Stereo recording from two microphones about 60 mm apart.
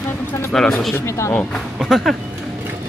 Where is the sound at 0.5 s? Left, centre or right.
Centre.